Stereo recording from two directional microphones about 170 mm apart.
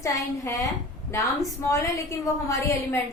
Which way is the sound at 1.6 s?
20° left (ahead or behind).